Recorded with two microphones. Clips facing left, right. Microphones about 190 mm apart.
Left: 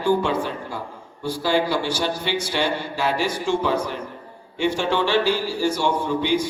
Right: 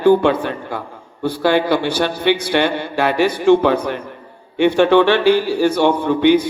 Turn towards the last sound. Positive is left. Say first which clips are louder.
# right 8 dB
turn(degrees=-60)  # may be behind; listen again after turning